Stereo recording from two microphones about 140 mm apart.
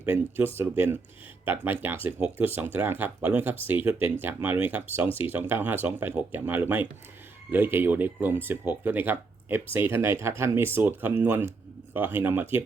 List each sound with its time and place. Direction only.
0.0 s speech: 15° right (ahead or behind)